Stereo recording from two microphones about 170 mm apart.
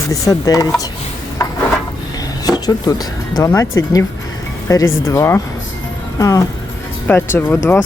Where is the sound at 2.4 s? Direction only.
20° left (ahead or behind).